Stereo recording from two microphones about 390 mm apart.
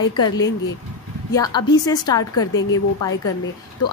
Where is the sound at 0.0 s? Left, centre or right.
Left.